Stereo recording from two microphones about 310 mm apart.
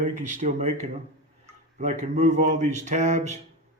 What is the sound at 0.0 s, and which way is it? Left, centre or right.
Speech, right.